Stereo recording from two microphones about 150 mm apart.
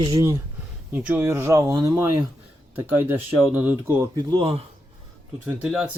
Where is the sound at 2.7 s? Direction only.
15° right (ahead or behind).